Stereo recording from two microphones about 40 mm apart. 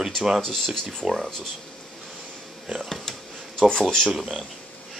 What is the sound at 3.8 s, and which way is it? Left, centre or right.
Speech, centre.